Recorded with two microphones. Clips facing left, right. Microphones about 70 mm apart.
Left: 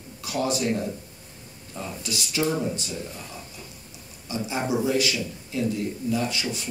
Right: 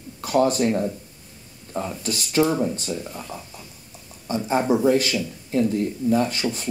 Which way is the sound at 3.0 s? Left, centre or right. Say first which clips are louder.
Right 3 dB; right.